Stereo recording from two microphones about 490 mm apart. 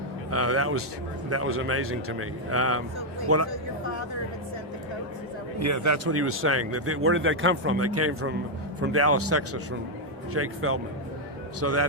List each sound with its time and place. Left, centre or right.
0.3 s speech: right
5.5 s speech: right